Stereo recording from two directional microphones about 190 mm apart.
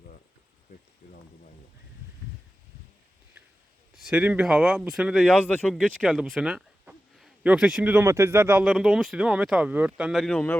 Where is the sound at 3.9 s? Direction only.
5° right (ahead or behind).